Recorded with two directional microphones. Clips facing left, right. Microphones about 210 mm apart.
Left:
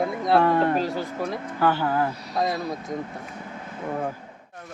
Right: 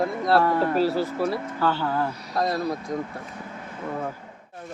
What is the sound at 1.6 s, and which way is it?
Speech, 15° left (ahead or behind).